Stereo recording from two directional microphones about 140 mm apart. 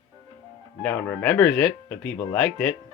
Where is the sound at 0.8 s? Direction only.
15° left (ahead or behind).